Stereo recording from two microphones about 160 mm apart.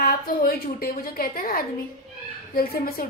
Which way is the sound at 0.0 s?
65° left (ahead or behind).